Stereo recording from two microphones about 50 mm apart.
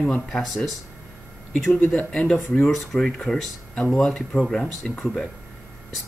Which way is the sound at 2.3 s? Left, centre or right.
Left.